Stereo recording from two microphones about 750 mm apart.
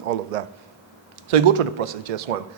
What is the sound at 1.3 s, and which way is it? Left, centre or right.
Speech, right.